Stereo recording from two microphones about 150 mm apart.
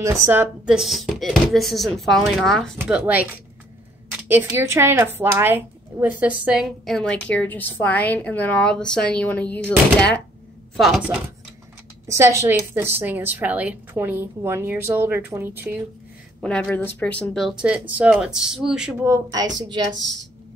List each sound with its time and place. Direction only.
0.0 s a woman's voice: 20° right (ahead or behind)
0.7 s speech: centre (ahead or behind)
2.9 s a woman's voice: 10° right (ahead or behind); by 10.2 s 10° left (ahead or behind)
10.8 s speech: 5° right (ahead or behind)
12.1 s a woman's voice: 20° right (ahead or behind)
16.3 s speech: 5° left (ahead or behind)
19.3 s a woman's voice: 25° right (ahead or behind)